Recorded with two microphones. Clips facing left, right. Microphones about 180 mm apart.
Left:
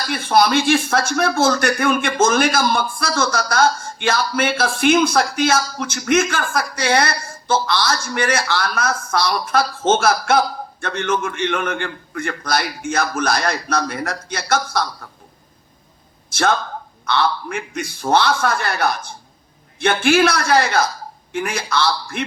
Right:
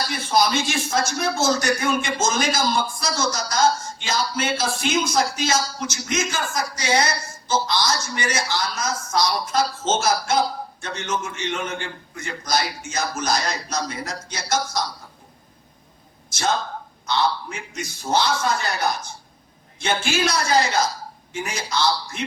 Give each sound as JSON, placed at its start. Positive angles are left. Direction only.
{"t": 0.1, "sound": "speech", "side_deg": 55}
{"t": 17.1, "sound": "speech", "side_deg": 60}